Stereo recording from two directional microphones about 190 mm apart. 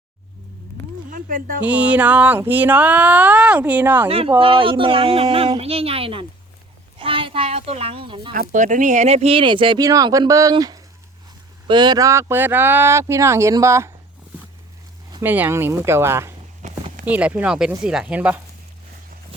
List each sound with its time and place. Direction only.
1.1 s a sound: 45° right (ahead or behind)
1.6 s speech: 5° right (ahead or behind)
4.4 s speech: 30° right (ahead or behind)
8.3 s speech: 40° right (ahead or behind); by 13.9 s 15° right (ahead or behind)
15.2 s speech: 10° right (ahead or behind)
16.6 s clip-clop: 40° right (ahead or behind)
17.1 s speech: 5° right (ahead or behind)